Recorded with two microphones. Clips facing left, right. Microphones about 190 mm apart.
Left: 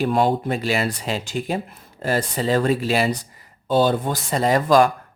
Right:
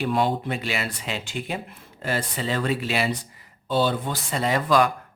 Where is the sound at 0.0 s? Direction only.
45° left (ahead or behind).